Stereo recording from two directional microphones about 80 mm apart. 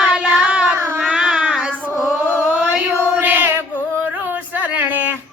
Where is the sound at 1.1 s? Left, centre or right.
Centre.